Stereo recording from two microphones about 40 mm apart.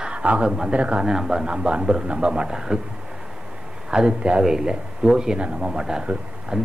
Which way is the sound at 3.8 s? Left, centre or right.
Right.